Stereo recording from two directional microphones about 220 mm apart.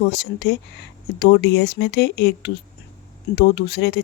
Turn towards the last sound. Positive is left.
turn(degrees=50)  # may be behind; listen again after turning